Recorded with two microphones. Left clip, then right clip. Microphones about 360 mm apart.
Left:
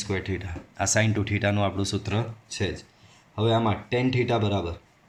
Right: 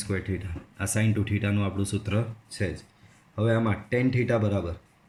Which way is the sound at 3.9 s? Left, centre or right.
Centre.